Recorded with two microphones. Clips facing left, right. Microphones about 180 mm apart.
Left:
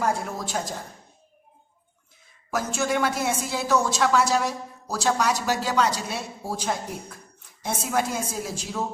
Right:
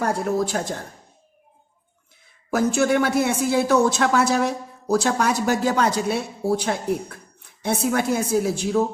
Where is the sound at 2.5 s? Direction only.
60° right (ahead or behind).